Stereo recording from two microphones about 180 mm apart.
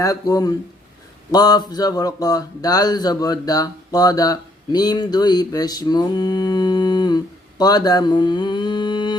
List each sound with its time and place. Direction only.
0.0 s speech: 20° left (ahead or behind)
7.6 s mantra: 20° left (ahead or behind)